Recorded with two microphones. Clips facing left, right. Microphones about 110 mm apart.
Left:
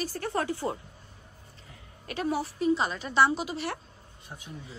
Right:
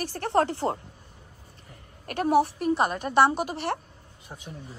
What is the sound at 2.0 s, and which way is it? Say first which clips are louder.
A woman's voice: right 8 dB; 55° right (ahead or behind).